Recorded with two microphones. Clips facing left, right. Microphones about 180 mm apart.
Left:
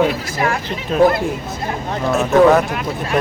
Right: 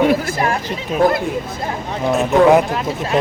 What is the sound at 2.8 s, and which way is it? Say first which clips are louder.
Speech: right 1 dB; 25° right (ahead or behind).